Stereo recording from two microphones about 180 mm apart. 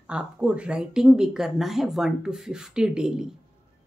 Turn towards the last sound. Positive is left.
turn(degrees=-5)  # may be behind; listen again after turning